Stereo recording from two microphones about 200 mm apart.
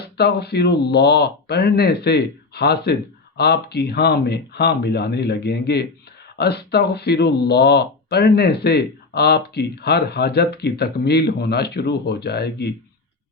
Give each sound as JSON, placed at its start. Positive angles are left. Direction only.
{"t": 0.2, "sound": "speech", "side_deg": 55}